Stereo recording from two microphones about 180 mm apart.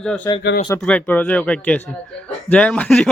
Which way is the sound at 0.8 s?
5° left (ahead or behind).